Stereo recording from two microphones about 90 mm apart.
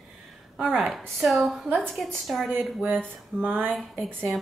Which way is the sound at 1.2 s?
Centre (ahead or behind).